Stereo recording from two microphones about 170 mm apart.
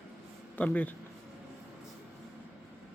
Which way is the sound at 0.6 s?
10° left (ahead or behind).